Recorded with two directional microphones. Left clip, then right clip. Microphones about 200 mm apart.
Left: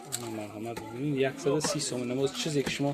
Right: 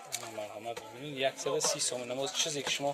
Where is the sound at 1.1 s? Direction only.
20° right (ahead or behind).